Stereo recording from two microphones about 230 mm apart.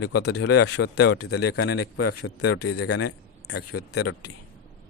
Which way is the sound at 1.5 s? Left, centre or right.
Left.